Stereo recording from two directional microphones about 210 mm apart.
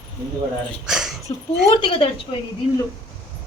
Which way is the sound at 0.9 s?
Centre (ahead or behind).